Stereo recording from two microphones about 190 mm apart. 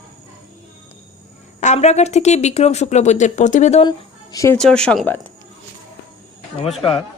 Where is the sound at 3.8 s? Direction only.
20° left (ahead or behind).